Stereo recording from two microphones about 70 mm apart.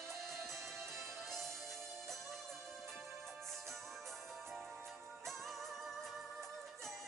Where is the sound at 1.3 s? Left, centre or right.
Centre.